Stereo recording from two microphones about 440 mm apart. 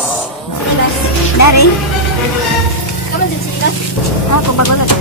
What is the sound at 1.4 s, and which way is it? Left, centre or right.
Music, left.